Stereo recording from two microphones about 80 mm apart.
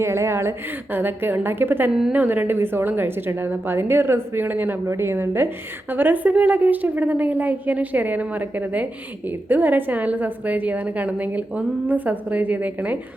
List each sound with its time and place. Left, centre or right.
0.0 s a woman's voice: right
1.9 s a woman's voice: centre
2.1 s a woman's voice: right